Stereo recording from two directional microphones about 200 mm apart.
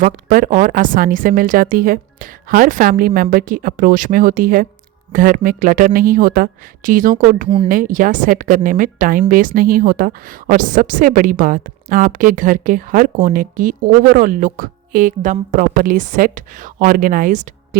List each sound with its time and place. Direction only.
0.0 s a woman's voice: 40° right (ahead or behind)